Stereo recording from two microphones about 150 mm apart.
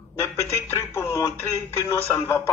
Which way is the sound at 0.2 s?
15° left (ahead or behind).